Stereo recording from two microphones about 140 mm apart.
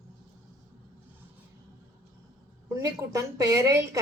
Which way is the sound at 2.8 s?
20° right (ahead or behind).